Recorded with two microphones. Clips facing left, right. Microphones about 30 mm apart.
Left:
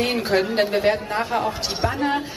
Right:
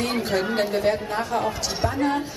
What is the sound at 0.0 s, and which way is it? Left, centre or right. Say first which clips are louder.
Speech: left 3 dB; left.